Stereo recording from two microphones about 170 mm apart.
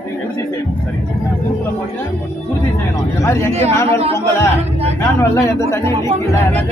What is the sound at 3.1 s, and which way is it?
Speech, 15° left (ahead or behind).